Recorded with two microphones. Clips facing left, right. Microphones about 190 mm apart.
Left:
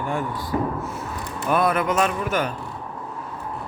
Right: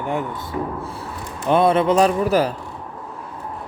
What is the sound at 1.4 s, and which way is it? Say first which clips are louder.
A man's voice: right 5 dB; 25° right (ahead or behind).